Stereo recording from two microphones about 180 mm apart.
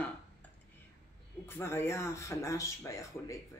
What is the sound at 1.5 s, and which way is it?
Speech, 15° left (ahead or behind).